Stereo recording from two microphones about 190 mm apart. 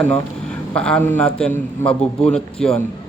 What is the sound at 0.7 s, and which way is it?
A man's voice, 5° left (ahead or behind).